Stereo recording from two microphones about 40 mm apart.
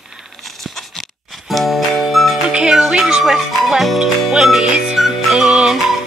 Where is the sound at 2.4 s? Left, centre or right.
Centre.